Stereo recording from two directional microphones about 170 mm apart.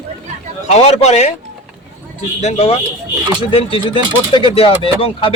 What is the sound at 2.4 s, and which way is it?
Speech, 35° left (ahead or behind).